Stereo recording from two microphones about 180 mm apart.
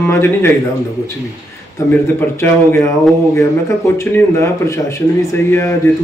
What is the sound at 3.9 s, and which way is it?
Speech, 15° left (ahead or behind).